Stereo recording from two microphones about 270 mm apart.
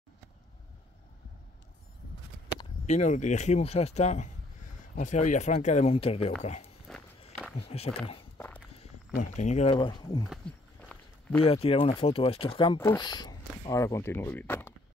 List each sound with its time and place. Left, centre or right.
2.5 s speech: left
8.4 s walk: centre
9.2 s speech: left
10.3 s walk: centre
11.4 s speech: left